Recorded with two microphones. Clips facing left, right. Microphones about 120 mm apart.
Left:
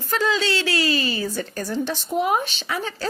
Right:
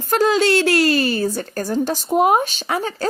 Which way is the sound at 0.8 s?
55° right (ahead or behind).